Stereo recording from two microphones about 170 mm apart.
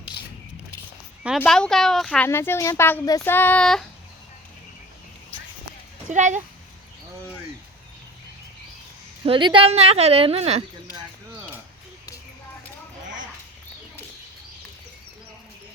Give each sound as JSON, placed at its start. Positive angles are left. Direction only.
{"t": 1.4, "sound": "speech", "side_deg": 5}
{"t": 6.1, "sound": "speech", "side_deg": -45}
{"t": 9.2, "sound": "a woman's voice", "side_deg": -30}